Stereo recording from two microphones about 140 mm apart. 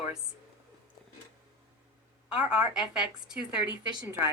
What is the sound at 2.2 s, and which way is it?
A woman's voice, 10° right (ahead or behind).